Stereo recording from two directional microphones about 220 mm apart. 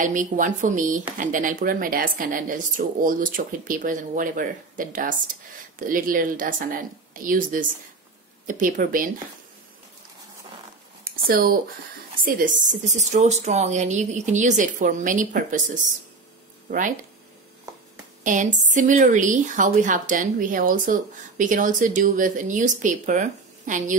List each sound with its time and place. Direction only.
0.0 s a woman's voice: 35° right (ahead or behind)
11.2 s a woman's voice: 40° right (ahead or behind)
18.2 s a woman's voice: 35° right (ahead or behind)